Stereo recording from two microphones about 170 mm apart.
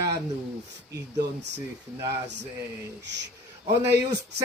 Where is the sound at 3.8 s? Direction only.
75° right (ahead or behind).